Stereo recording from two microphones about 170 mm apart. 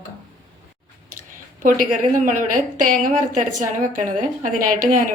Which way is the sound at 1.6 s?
50° right (ahead or behind).